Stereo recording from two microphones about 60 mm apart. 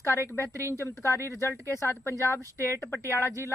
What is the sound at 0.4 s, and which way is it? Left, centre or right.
Speech, right.